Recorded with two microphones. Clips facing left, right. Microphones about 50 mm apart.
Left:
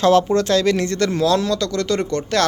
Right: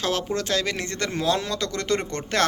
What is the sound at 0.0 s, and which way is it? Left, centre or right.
Speech, centre.